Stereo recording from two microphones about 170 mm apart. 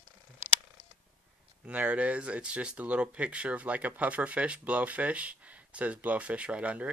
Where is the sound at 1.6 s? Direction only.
10° right (ahead or behind).